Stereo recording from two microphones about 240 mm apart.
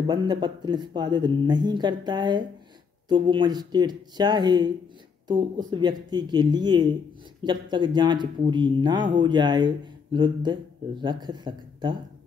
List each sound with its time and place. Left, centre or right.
0.0 s speech: centre